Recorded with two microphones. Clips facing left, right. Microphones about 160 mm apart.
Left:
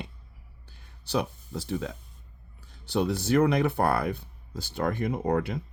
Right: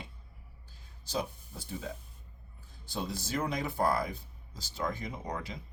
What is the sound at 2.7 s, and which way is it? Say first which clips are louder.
Speech: left 11 dB; 70° left (ahead or behind).